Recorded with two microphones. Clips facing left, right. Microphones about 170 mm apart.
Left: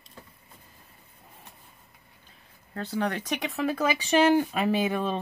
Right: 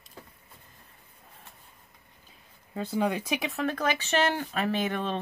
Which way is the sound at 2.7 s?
10° right (ahead or behind).